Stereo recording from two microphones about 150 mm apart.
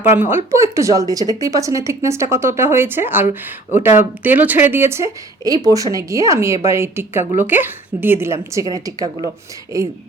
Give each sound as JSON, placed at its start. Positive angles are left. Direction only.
{"t": 0.2, "sound": "a woman's voice", "side_deg": -15}
{"t": 3.2, "sound": "speech", "side_deg": 55}
{"t": 3.9, "sound": "a woman's voice", "side_deg": -10}
{"t": 9.7, "sound": "a woman's voice", "side_deg": -20}